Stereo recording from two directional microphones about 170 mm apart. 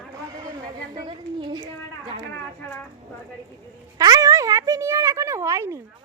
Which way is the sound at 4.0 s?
20° right (ahead or behind).